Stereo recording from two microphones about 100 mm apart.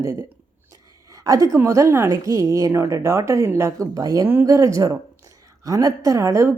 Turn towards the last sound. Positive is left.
turn(degrees=-30)  # may be behind; listen again after turning